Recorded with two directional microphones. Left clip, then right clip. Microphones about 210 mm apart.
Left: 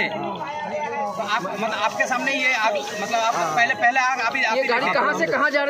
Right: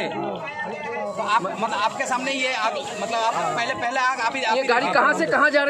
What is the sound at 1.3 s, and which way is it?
A man's voice, 35° right (ahead or behind).